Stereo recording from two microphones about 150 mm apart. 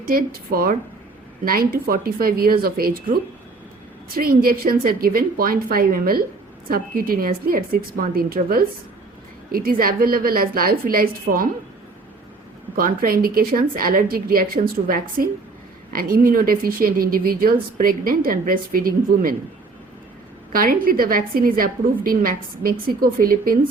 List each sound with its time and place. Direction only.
0.0 s a woman's voice: 75° right (ahead or behind)
12.7 s speech: 75° right (ahead or behind)
20.5 s a woman's voice: 70° right (ahead or behind)